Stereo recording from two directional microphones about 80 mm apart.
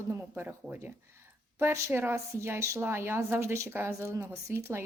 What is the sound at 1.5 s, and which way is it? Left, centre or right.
A woman's voice, right.